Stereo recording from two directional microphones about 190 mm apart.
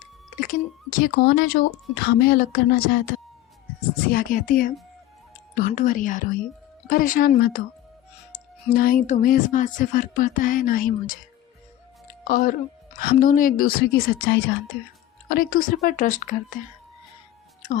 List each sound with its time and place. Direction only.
0.3 s speech: 45° left (ahead or behind)
4.1 s speech: 50° left (ahead or behind)
8.7 s speech: 50° left (ahead or behind)
12.3 s speech: 50° left (ahead or behind)